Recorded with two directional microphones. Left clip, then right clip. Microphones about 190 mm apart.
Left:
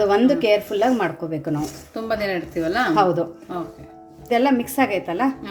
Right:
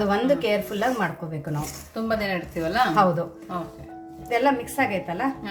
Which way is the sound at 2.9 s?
30° left (ahead or behind).